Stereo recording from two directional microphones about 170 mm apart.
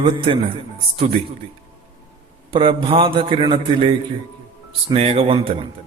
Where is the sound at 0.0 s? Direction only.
30° right (ahead or behind).